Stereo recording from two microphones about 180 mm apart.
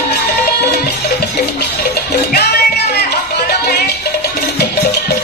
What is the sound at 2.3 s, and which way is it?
Music, 60° left (ahead or behind).